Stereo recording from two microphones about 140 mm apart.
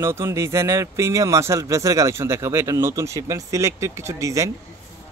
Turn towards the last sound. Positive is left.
turn(degrees=-20)  # may be behind; listen again after turning